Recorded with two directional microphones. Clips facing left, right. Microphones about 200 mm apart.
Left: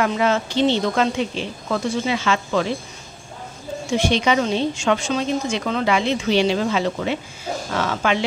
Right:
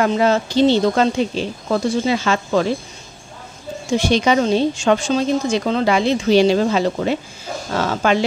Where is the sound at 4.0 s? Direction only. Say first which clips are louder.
Right 3 dB; 40° right (ahead or behind).